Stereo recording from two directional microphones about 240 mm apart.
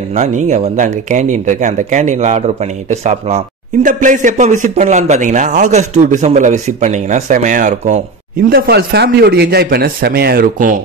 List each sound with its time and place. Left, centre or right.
0.1 s speech: right